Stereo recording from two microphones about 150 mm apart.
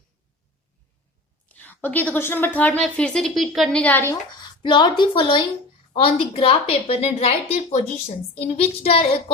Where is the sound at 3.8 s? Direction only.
15° left (ahead or behind).